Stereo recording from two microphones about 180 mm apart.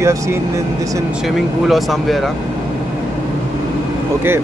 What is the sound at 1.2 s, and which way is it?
Speech, centre (ahead or behind).